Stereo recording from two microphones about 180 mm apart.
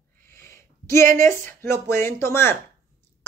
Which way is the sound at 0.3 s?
15° left (ahead or behind).